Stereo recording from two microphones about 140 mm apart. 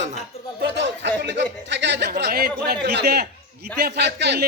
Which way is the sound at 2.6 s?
90° right.